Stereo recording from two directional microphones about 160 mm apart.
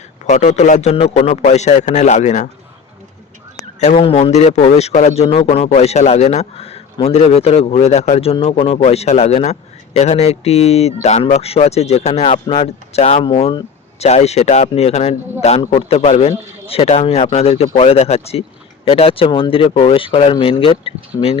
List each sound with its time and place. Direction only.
0.3 s speech: 50° left (ahead or behind)
3.8 s a man's voice: 45° left (ahead or behind); by 13.7 s 30° left (ahead or behind)
14.0 s a man's voice: 40° left (ahead or behind)